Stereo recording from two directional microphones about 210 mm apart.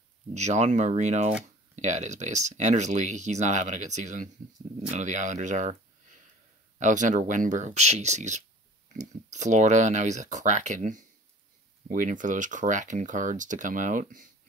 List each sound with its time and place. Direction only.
0.3 s speech: 35° right (ahead or behind)
6.8 s speech: 35° right (ahead or behind)